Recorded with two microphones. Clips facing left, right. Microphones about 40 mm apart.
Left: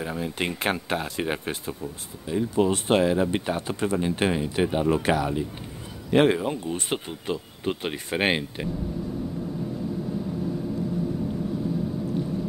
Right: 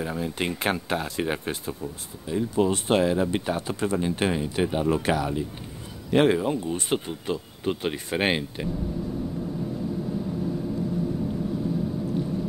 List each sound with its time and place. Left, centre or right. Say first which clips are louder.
0.0 s speech: even; centre; by 5.4 s left
6.1 s speech: even; left